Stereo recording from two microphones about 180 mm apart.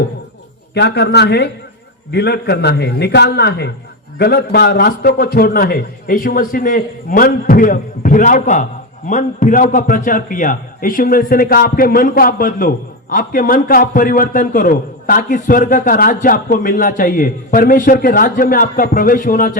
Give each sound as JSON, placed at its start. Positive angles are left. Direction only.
{"t": 0.7, "sound": "a man's voice", "side_deg": 70}